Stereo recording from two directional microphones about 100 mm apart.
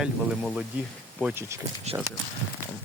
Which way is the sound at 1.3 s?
25° right (ahead or behind).